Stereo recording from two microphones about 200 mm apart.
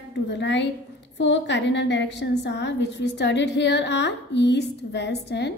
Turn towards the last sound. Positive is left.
turn(degrees=60)  # may be behind; listen again after turning